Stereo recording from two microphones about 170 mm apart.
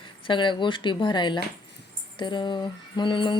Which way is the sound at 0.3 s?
30° left (ahead or behind).